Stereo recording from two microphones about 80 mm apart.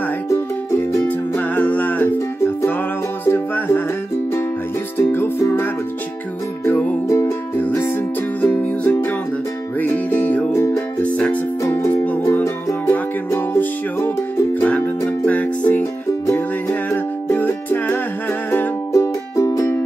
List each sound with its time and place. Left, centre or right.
0.3 s music: left
1.0 s music: left
3.3 s music: left
4.9 s music: left
6.6 s music: left
7.1 s music: left
10.5 s music: left
11.0 s music: centre; by 19.8 s left